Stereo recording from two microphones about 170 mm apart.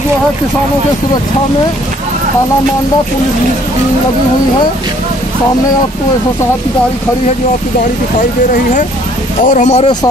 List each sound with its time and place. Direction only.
9.4 s speech: 45° left (ahead or behind)